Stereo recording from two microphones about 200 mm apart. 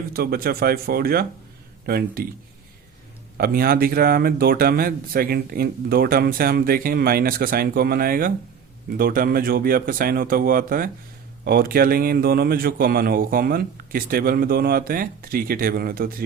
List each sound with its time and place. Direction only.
0.1 s speech: 50° right (ahead or behind)
3.3 s speech: 50° right (ahead or behind)